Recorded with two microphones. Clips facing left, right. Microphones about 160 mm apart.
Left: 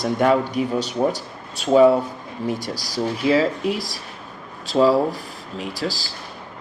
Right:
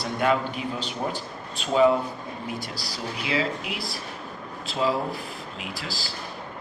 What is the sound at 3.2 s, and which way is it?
Speech, 40° left (ahead or behind).